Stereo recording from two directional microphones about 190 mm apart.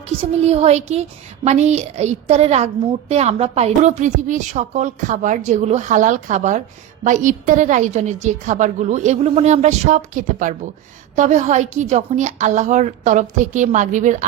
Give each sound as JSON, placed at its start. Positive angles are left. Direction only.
{"t": 0.2, "sound": "a woman's voice", "side_deg": -30}